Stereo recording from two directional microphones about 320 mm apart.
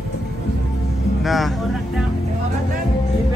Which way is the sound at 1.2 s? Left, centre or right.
Centre.